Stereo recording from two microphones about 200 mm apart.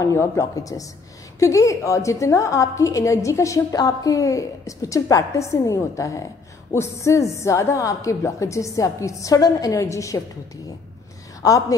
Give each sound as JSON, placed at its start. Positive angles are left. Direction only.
{"t": 0.0, "sound": "a woman's voice", "side_deg": 15}
{"t": 11.4, "sound": "a woman's voice", "side_deg": 15}